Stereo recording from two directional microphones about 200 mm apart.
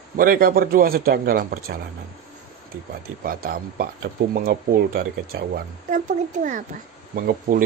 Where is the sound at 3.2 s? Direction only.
45° right (ahead or behind).